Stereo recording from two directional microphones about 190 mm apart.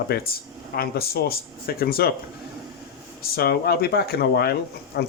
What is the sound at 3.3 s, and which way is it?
Speech, 55° left (ahead or behind).